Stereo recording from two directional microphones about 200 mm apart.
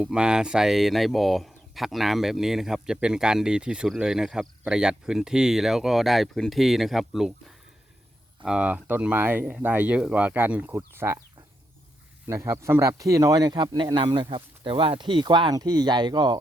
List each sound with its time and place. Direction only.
0.0 s speech: 5° right (ahead or behind)
8.4 s speech: 5° right (ahead or behind)
12.3 s speech: 15° right (ahead or behind)